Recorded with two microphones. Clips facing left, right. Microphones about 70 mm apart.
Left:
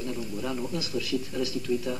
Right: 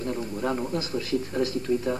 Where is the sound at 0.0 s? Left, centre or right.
Right.